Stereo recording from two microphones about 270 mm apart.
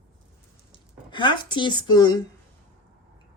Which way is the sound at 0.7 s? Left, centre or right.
Centre.